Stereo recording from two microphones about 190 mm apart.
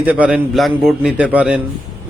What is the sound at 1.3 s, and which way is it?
Mantra, 5° right (ahead or behind).